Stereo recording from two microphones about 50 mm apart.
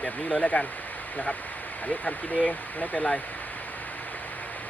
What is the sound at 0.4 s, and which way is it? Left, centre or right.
Speech, left.